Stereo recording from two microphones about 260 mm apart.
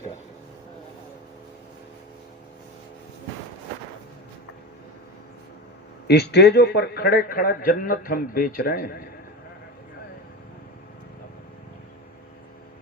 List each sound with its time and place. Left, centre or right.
6.1 s a man's voice: left